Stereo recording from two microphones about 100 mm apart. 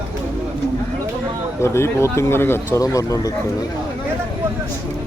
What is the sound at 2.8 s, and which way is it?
Speech, 35° left (ahead or behind).